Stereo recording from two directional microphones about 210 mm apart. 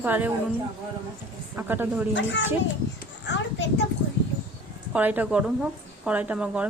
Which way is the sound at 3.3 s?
60° left (ahead or behind).